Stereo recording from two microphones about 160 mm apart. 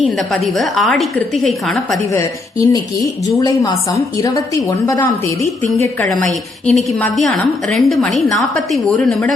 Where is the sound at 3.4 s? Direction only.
20° left (ahead or behind).